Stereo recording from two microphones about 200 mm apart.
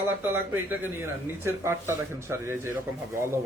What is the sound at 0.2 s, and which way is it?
A man's voice, 10° right (ahead or behind).